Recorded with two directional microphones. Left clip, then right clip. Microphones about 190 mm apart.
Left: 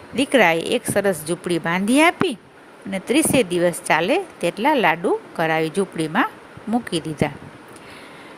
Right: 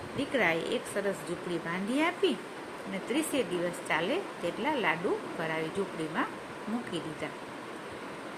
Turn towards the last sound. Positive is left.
turn(degrees=55)  # may be behind; listen again after turning